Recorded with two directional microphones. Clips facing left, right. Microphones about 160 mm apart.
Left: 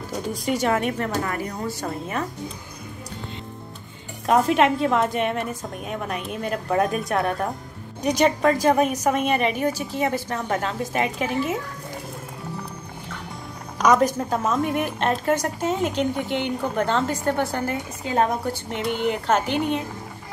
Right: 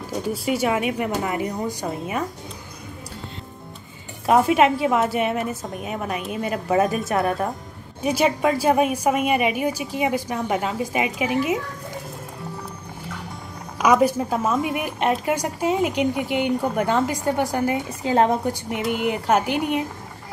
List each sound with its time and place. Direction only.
0.3 s speech: 10° right (ahead or behind)
4.3 s a woman's voice: 5° right (ahead or behind)
13.7 s speech: 10° right (ahead or behind)
18.0 s a woman's voice: 30° right (ahead or behind)
18.4 s speech: 15° right (ahead or behind)